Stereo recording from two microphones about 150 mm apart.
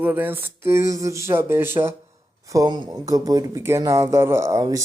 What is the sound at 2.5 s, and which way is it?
Speech, 25° right (ahead or behind).